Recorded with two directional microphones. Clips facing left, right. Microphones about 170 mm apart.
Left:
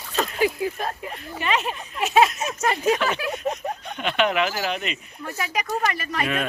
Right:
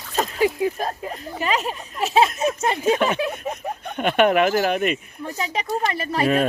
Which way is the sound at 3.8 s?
50° right (ahead or behind).